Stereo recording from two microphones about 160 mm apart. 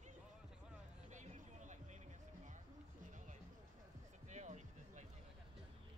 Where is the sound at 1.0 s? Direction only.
50° right (ahead or behind).